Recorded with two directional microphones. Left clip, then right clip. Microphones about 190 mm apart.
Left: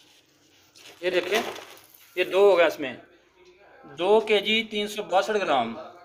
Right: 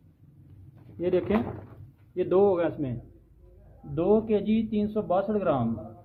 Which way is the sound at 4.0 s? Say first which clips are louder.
Left 3 dB; 10° left (ahead or behind).